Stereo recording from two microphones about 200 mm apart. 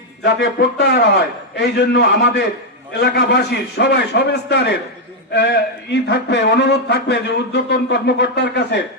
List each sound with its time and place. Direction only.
0.2 s speech: 55° left (ahead or behind)